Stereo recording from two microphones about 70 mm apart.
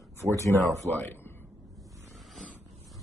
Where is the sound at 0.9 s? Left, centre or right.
Right.